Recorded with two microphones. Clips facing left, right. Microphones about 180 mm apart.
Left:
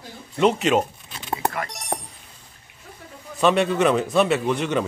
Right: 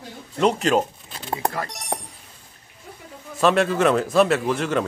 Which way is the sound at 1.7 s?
Centre (ahead or behind).